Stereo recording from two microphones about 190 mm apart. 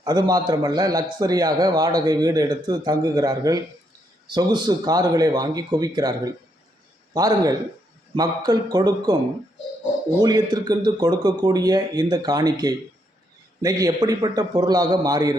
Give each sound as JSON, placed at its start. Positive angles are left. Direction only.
{"t": 0.0, "sound": "a man's voice", "side_deg": -20}
{"t": 10.2, "sound": "a man's voice", "side_deg": -20}